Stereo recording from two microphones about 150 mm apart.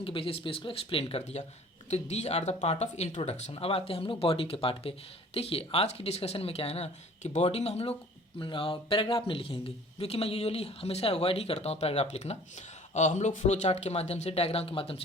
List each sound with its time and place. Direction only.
0.0 s speech: 35° left (ahead or behind)